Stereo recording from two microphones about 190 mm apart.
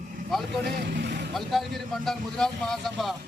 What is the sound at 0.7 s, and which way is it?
Vehicle, 65° right (ahead or behind).